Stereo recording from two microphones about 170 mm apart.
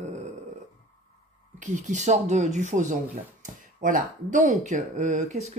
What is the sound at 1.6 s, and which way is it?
Speech, 45° right (ahead or behind).